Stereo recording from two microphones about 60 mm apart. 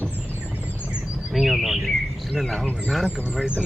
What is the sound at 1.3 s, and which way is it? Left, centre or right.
Bird, centre.